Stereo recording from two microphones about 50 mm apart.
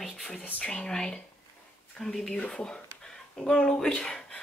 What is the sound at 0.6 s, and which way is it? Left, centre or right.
Speech, left.